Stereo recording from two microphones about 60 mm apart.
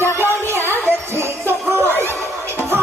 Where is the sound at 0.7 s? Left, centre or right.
Right.